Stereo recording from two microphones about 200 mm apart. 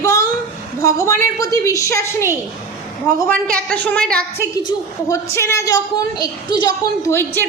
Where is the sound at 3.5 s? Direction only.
5° left (ahead or behind).